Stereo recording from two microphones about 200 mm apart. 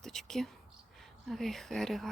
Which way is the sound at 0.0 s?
Centre (ahead or behind).